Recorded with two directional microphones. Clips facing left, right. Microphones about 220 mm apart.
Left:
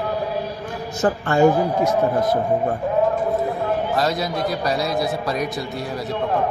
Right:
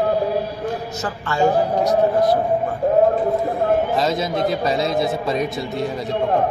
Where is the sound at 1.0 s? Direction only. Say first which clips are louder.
Left 5 dB; 50° left (ahead or behind).